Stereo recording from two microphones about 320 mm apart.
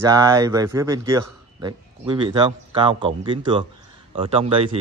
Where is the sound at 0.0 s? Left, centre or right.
Centre.